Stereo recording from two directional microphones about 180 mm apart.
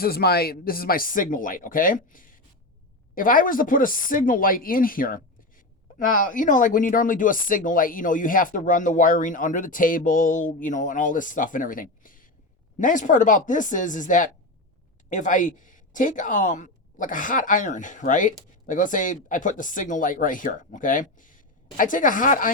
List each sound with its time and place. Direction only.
0.0 s speech: 60° left (ahead or behind)